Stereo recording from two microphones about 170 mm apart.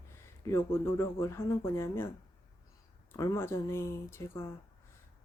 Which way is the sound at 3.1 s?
15° left (ahead or behind).